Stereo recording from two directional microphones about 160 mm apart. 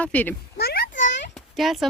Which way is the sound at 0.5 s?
85° left.